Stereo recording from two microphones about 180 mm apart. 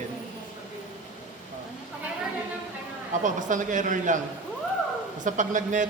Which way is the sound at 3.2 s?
45° right (ahead or behind).